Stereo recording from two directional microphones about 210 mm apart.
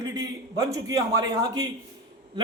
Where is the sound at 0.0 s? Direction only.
20° right (ahead or behind).